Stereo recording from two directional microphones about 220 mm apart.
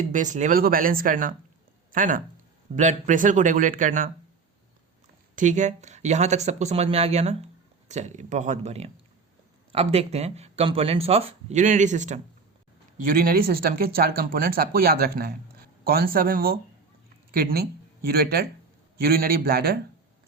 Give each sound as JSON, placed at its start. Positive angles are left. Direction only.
{"t": 0.1, "sound": "speech", "side_deg": -35}
{"t": 5.4, "sound": "speech", "side_deg": -35}